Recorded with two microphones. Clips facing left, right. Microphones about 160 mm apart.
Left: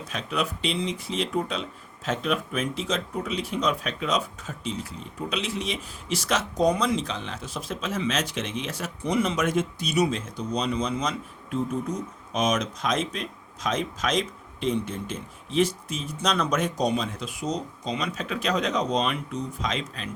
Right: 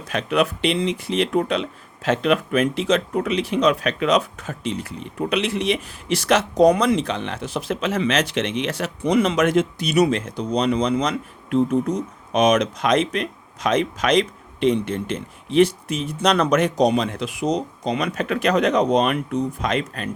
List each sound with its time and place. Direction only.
0.1 s speech: 70° right (ahead or behind)